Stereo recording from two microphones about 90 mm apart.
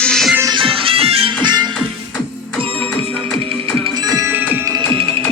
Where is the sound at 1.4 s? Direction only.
55° right (ahead or behind).